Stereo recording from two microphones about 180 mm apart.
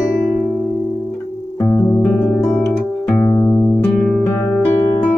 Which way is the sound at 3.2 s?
15° left (ahead or behind).